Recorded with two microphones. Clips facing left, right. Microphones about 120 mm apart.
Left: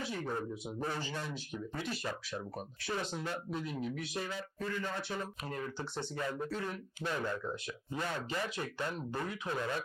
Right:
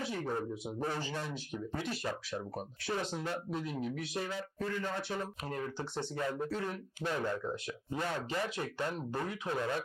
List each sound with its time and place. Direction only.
0.0 s a man's voice: 50° right (ahead or behind)